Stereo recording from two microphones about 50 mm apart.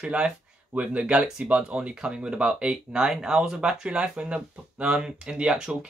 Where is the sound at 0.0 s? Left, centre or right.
Right.